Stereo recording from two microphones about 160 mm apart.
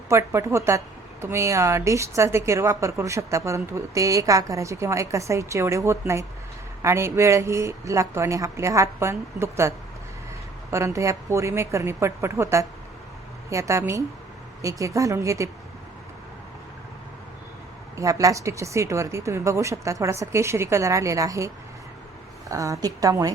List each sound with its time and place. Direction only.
0.1 s a woman's voice: 15° right (ahead or behind)
17.9 s a woman's voice: 20° right (ahead or behind)